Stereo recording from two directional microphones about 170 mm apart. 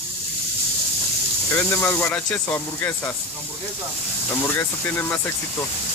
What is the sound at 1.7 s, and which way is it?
Speech, 15° left (ahead or behind).